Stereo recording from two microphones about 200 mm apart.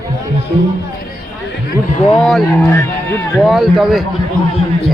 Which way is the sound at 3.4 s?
Centre (ahead or behind).